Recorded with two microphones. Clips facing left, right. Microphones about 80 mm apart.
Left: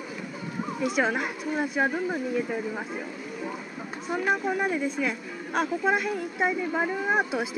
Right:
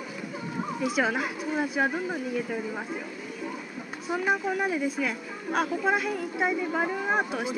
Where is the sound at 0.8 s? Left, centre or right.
Centre.